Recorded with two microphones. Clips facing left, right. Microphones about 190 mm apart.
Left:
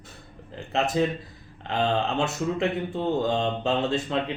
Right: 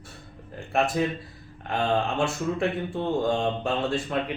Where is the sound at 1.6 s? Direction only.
20° left (ahead or behind).